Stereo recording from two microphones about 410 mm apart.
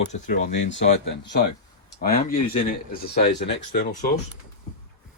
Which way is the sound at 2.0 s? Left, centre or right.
Left.